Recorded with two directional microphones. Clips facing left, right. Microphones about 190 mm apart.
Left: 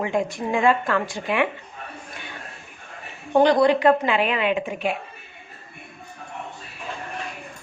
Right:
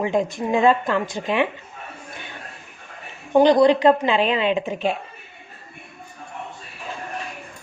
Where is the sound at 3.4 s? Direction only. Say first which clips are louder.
Right 2 dB; 20° right (ahead or behind).